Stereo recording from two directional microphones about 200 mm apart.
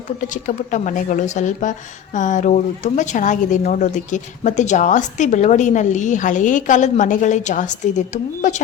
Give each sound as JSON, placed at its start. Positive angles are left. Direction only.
{"t": 0.2, "sound": "a woman's voice", "side_deg": 40}